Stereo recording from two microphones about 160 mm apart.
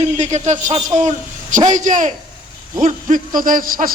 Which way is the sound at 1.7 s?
50° right (ahead or behind).